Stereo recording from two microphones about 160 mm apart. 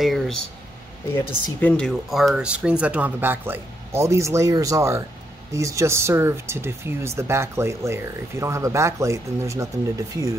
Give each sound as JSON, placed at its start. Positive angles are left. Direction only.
{"t": 0.0, "sound": "speech", "side_deg": 0}